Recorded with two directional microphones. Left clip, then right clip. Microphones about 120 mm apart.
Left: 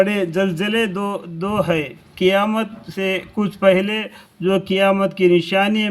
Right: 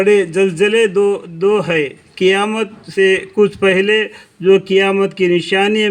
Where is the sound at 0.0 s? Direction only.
35° right (ahead or behind).